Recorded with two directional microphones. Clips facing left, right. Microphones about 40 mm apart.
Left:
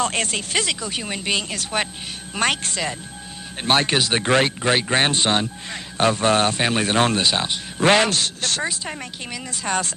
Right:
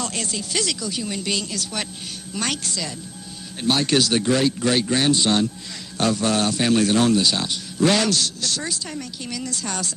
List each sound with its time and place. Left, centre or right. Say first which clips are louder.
0.0 s speech: left 5 dB; left
0.6 s speech: left 1 dB; left
3.9 s speech: right 1 dB; left
4.2 s speech: left 1 dB; left
8.6 s speech: left 2 dB; left